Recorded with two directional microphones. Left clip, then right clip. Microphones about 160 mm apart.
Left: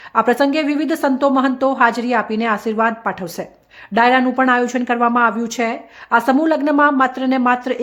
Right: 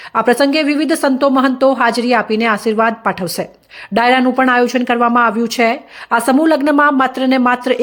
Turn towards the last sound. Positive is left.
turn(degrees=-15)  # may be behind; listen again after turning